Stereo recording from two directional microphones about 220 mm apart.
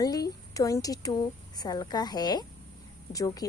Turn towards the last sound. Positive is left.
turn(degrees=15)  # may be behind; listen again after turning